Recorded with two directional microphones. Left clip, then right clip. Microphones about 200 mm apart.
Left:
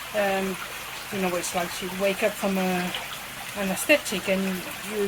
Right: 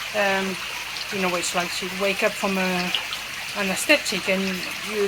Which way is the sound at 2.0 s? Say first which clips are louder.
Right 2 dB; centre (ahead or behind).